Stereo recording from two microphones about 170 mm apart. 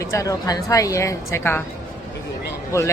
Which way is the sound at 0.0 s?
20° left (ahead or behind).